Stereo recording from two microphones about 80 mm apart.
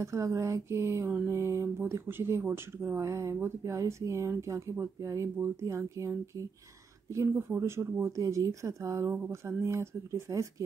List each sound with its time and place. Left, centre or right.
0.0 s speech: right
8.2 s speech: right